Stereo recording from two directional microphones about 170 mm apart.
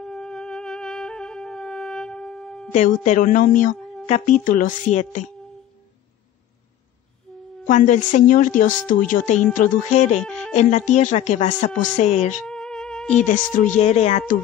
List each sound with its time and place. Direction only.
0.0 s music: 5° left (ahead or behind)
2.7 s speech: 45° left (ahead or behind)
7.3 s music: 5° left (ahead or behind)
7.6 s speech: 50° left (ahead or behind)
12.4 s music: 5° left (ahead or behind)
13.2 s speech: 50° left (ahead or behind)